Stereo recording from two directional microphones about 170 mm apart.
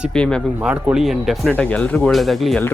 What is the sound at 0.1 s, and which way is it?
Speech, 5° left (ahead or behind).